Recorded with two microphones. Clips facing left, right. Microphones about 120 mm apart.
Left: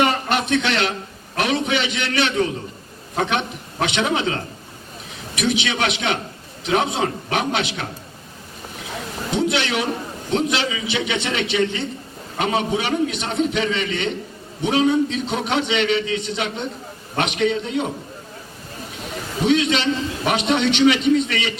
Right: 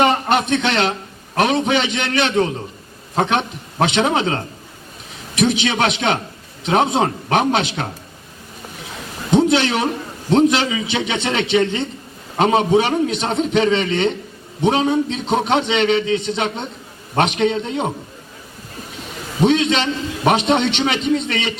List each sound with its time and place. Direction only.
0.3 s a man's voice: 35° right (ahead or behind)
9.3 s a man's voice: 35° right (ahead or behind)
19.5 s a man's voice: 30° right (ahead or behind)